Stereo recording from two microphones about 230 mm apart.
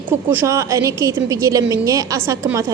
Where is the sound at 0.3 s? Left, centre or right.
Centre.